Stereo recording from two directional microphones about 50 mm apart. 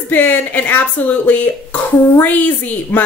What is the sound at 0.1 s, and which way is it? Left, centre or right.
Speech, left.